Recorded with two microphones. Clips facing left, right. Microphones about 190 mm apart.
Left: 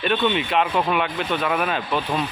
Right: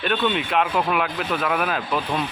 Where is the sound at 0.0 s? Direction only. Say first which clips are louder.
Left 1 dB; centre (ahead or behind).